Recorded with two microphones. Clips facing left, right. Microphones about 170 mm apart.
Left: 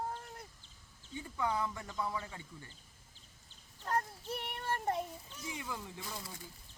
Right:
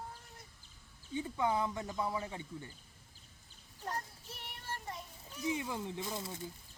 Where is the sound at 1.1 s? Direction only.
20° right (ahead or behind).